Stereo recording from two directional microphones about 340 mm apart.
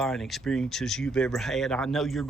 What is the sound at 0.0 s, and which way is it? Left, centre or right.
Speech, centre.